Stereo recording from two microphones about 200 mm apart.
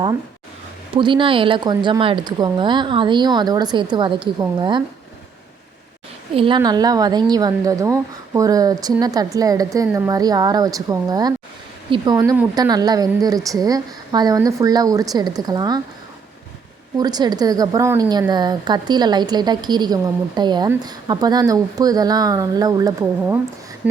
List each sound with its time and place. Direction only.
0.9 s a woman's voice: 25° right (ahead or behind)
6.3 s a woman's voice: 25° right (ahead or behind)
17.0 s a woman's voice: 20° right (ahead or behind)
23.8 s a sound: 5° right (ahead or behind)